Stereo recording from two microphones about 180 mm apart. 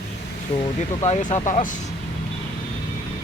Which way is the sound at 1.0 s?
40° left (ahead or behind).